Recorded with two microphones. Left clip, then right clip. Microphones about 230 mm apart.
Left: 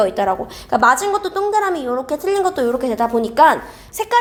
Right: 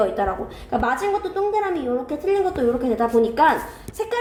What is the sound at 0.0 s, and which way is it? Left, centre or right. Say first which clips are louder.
A woman's voice: left 5 dB; left.